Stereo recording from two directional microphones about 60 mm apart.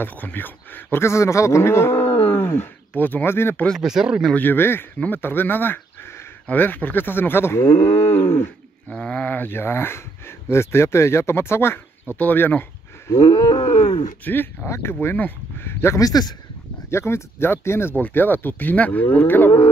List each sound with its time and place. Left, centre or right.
0.0 s speech: left
1.0 s speech: left
3.7 s speech: centre
4.4 s speech: left
8.8 s speech: centre
9.3 s speech: left
12.2 s speech: left
13.1 s wild animals: left
14.2 s speech: left
14.7 s speech: left
17.9 s speech: left